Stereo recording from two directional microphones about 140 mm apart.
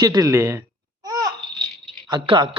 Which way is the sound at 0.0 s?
25° right (ahead or behind).